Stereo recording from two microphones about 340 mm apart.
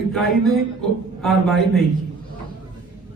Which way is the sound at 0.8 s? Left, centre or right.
Centre.